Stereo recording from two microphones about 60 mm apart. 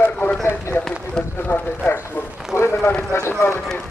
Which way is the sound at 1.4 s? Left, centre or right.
Left.